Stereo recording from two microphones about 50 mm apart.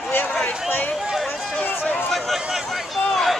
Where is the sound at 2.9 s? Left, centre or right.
Centre.